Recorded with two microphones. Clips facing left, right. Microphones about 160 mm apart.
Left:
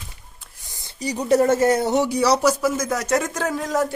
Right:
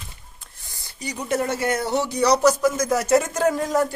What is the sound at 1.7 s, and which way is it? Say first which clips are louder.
Speech: left 4 dB; 20° left (ahead or behind).